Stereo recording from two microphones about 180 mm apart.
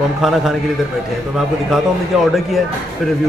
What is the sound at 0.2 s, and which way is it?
Speech, centre (ahead or behind).